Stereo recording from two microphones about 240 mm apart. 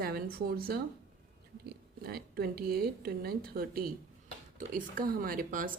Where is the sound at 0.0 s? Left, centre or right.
Right.